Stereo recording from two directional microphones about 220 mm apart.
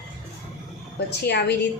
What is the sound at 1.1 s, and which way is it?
Speech, 50° left (ahead or behind).